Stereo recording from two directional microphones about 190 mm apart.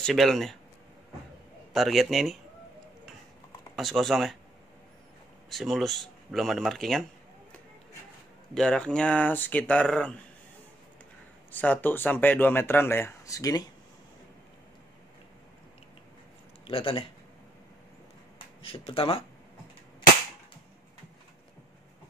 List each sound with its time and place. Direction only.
0.0 s speech: centre (ahead or behind)
1.7 s speech: centre (ahead or behind)
3.7 s speech: centre (ahead or behind)
5.5 s speech: centre (ahead or behind)
8.5 s speech: 5° left (ahead or behind)
11.5 s speech: 10° left (ahead or behind)
16.6 s speech: 30° left (ahead or behind)
18.6 s speech: 30° left (ahead or behind)